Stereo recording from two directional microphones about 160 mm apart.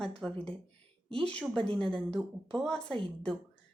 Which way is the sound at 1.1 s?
5° left (ahead or behind).